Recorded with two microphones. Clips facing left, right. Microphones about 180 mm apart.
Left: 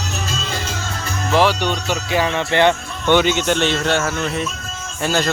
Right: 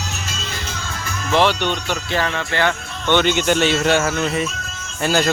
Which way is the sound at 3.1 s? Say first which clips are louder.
Even; centre (ahead or behind).